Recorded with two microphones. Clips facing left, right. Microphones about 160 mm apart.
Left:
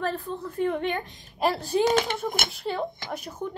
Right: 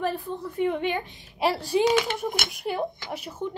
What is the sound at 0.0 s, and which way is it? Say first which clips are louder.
A woman's voice: right 1 dB; 15° right (ahead or behind).